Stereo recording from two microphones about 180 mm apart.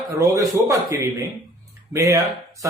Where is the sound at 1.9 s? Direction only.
15° right (ahead or behind).